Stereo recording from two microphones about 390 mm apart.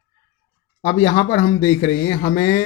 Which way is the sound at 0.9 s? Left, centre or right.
Centre.